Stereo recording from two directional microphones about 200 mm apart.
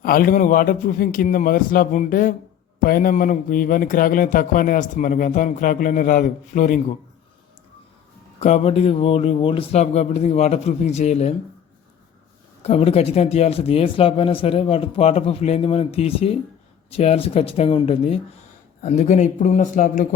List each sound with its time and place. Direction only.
0.0 s a man's voice: 45° left (ahead or behind)
8.4 s speech: 35° left (ahead or behind)
12.6 s speech: 30° left (ahead or behind)